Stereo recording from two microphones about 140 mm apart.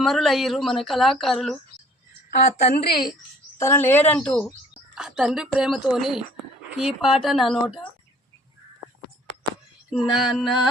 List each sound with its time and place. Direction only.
0.0 s speech: centre (ahead or behind)
2.4 s a woman's voice: 60° left (ahead or behind)
3.6 s speech: 20° left (ahead or behind)
4.9 s speech: 5° right (ahead or behind)
10.2 s speech: centre (ahead or behind)